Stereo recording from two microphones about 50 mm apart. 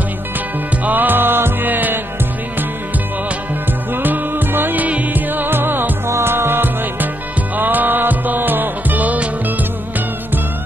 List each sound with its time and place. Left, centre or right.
0.8 s music: right
3.9 s music: right
6.0 s music: right